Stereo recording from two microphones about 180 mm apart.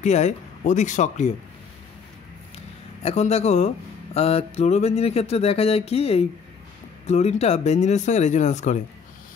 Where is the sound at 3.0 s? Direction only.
35° left (ahead or behind).